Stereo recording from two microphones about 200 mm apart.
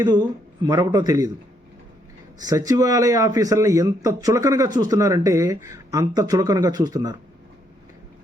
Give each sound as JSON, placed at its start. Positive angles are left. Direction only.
{"t": 0.0, "sound": "speech", "side_deg": -20}
{"t": 2.5, "sound": "speech", "side_deg": -15}